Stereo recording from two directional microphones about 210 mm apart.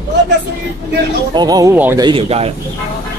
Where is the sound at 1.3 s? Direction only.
20° right (ahead or behind).